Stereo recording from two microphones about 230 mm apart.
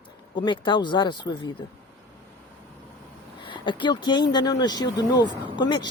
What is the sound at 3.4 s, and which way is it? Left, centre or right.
Speech, left.